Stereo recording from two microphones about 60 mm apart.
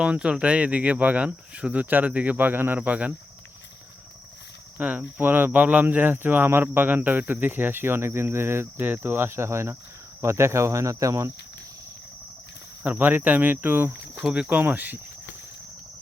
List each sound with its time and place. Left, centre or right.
0.0 s speech: centre
4.8 s speech: right
5.2 s speech: right
10.2 s cricket: right
12.8 s speech: right
14.3 s speech: centre
14.5 s speech: right